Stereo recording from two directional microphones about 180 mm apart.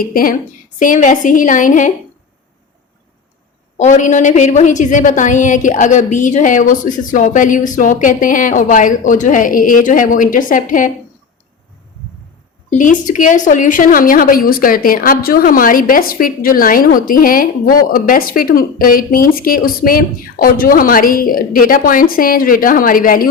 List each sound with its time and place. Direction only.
0.0 s a woman's voice: 50° left (ahead or behind)
3.8 s a woman's voice: 40° left (ahead or behind)
12.7 s a woman's voice: 45° left (ahead or behind)